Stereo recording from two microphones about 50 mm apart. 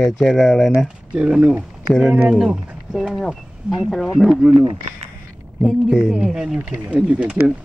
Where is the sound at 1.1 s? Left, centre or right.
Centre.